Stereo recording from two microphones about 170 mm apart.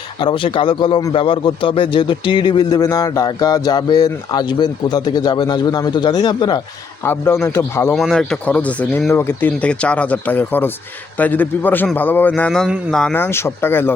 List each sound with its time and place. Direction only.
0.2 s a man's voice: 30° left (ahead or behind)
7.0 s speech: 15° left (ahead or behind)
7.9 s speech: centre (ahead or behind)